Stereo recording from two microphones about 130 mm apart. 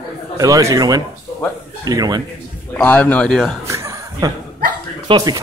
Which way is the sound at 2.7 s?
10° left (ahead or behind).